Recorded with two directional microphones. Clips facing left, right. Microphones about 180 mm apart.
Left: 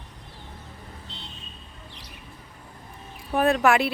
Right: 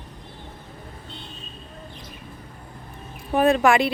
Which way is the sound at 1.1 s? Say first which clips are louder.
Right 3 dB; 50° right (ahead or behind).